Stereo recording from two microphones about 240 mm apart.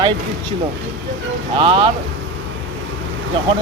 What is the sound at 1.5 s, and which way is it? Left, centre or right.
Speech, right.